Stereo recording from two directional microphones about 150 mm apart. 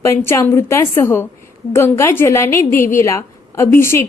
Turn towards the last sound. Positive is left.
turn(degrees=15)  # may be behind; listen again after turning